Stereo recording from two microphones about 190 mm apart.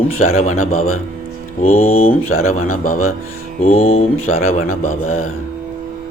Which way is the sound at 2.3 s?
90° left.